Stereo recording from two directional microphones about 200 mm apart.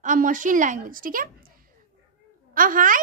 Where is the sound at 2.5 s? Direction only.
45° right (ahead or behind).